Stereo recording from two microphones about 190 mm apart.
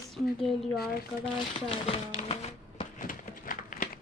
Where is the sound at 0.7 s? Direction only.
55° left (ahead or behind).